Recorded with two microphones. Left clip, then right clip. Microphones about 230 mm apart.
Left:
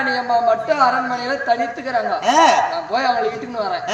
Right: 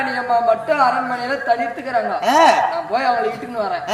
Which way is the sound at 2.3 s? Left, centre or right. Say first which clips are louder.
Right 1 dB; centre.